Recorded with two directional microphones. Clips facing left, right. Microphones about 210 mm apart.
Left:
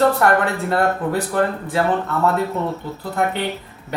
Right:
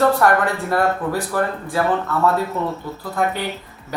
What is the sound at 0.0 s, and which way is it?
Speech, 25° left (ahead or behind).